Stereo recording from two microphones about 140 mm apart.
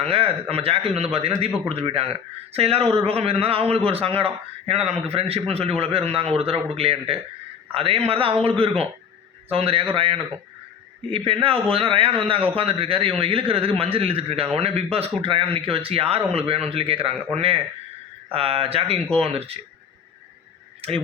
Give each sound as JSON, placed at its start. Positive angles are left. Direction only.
{"t": 0.0, "sound": "a man's voice", "side_deg": -45}